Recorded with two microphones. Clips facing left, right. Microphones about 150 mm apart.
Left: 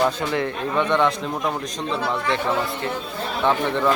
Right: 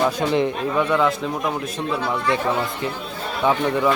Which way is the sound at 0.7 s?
10° right (ahead or behind).